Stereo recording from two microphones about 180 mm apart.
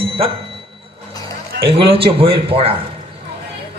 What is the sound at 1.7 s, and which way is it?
Speech, 30° right (ahead or behind).